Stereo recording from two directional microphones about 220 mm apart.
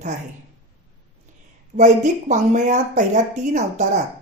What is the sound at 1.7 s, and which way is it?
Speech, 35° right (ahead or behind).